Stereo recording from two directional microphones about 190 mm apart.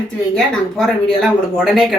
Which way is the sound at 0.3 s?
Centre (ahead or behind).